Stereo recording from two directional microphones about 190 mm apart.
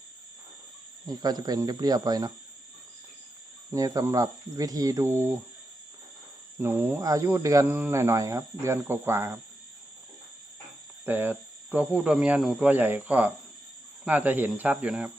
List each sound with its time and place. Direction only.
1.0 s speech: 20° right (ahead or behind)
3.7 s speech: 20° right (ahead or behind)
6.6 s speech: 10° right (ahead or behind)
11.0 s speech: 10° right (ahead or behind)